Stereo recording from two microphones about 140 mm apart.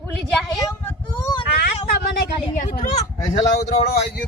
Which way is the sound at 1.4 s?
40° left (ahead or behind).